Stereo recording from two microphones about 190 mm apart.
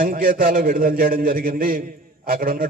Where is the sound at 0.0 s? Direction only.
45° right (ahead or behind).